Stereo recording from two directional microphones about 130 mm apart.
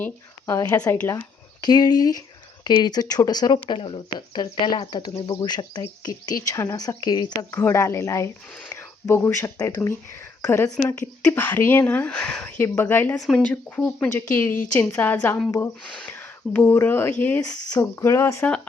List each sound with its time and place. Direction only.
0.0 s a woman's voice: 20° left (ahead or behind)
1.6 s speech: 30° left (ahead or behind)
7.5 s speech: 20° left (ahead or behind)
13.1 s speech: 5° left (ahead or behind)